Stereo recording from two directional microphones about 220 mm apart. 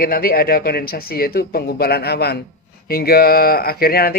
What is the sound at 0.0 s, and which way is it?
Speech, 40° left (ahead or behind).